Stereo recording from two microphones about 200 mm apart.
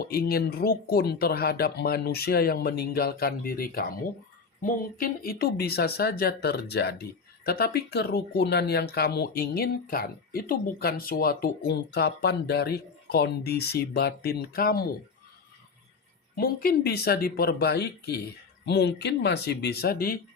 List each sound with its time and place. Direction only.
0.0 s speech: 50° left (ahead or behind)
16.3 s speech: 50° left (ahead or behind)